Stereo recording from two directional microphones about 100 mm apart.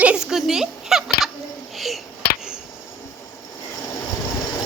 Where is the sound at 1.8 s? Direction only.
Centre (ahead or behind).